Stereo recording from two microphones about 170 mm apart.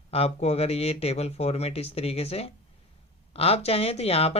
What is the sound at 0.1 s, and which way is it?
Speech, 35° left (ahead or behind).